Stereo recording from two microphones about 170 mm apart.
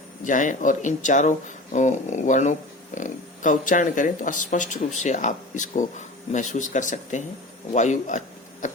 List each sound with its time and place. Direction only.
0.3 s speech: 50° left (ahead or behind)